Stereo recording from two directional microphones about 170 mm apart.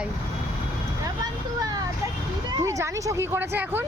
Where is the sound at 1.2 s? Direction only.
25° right (ahead or behind).